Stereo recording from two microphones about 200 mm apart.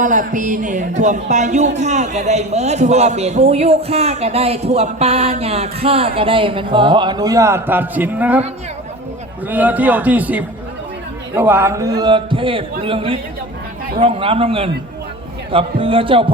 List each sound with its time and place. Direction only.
0.0 s speech: 40° right (ahead or behind); by 8.4 s 10° right (ahead or behind)
9.5 s a man's voice: 10° right (ahead or behind); by 16.2 s 25° right (ahead or behind)